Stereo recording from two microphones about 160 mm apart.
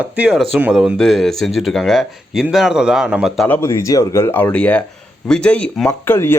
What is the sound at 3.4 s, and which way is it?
Speech, 15° left (ahead or behind).